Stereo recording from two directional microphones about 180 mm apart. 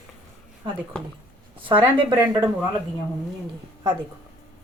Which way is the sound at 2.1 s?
15° right (ahead or behind).